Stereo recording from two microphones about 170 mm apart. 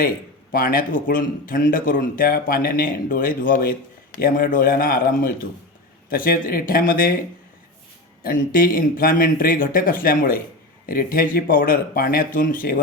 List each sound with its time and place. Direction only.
0.5 s speech: 55° left (ahead or behind)
8.2 s speech: 55° left (ahead or behind)